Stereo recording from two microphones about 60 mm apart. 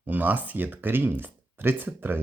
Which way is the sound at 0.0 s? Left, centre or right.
Right.